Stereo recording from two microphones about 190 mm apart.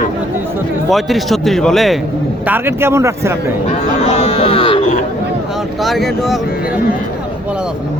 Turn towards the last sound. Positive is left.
turn(degrees=0)  # may be behind; listen again after turning